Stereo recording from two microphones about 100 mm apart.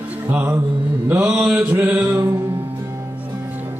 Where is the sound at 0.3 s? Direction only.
15° right (ahead or behind).